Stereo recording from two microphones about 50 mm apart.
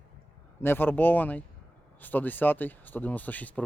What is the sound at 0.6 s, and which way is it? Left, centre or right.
Speech, left.